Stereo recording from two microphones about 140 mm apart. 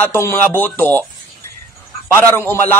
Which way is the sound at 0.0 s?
15° left (ahead or behind).